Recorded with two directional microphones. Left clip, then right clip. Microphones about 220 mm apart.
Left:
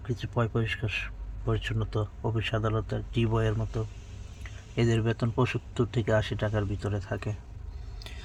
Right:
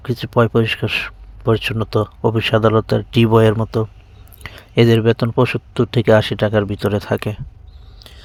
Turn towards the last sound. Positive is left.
turn(degrees=-45)  # may be behind; listen again after turning